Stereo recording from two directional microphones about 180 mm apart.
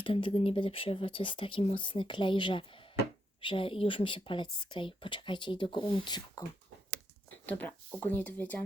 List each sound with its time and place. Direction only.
0.0 s a woman's voice: 30° left (ahead or behind)
7.9 s speech: 10° left (ahead or behind)